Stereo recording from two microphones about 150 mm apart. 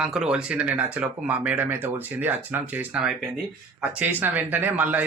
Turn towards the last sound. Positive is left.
turn(degrees=-10)  # may be behind; listen again after turning